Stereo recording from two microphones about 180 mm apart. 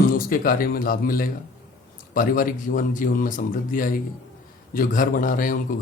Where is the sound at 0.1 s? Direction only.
50° left (ahead or behind).